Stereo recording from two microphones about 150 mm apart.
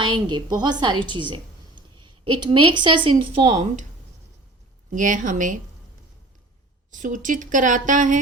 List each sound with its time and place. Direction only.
0.0 s speech: 30° right (ahead or behind); by 3.8 s 50° right (ahead or behind)
4.9 s a woman's voice: 60° right (ahead or behind)
6.9 s a woman's voice: 60° right (ahead or behind)